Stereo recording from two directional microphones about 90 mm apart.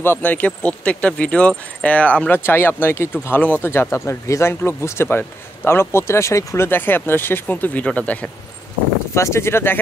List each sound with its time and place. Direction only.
0.0 s speech: 25° left (ahead or behind)
9.1 s speech: 30° left (ahead or behind)